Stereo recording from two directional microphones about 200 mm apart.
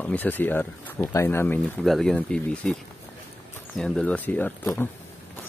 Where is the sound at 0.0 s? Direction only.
10° left (ahead or behind).